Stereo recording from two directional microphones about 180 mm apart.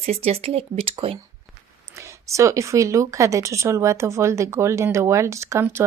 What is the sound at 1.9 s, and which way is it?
Speech, 15° right (ahead or behind).